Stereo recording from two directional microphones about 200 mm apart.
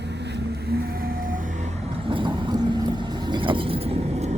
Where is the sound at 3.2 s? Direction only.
25° right (ahead or behind).